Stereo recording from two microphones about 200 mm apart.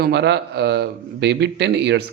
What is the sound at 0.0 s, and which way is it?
Speech, 60° right (ahead or behind).